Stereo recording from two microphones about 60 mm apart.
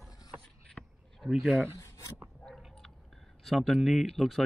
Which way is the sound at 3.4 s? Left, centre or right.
Centre.